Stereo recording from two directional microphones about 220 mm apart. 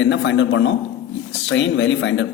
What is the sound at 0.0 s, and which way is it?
A man's voice, 55° left (ahead or behind).